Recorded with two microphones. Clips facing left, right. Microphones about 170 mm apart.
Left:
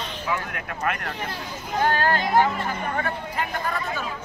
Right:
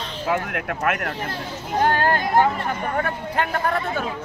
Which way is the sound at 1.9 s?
55° right (ahead or behind).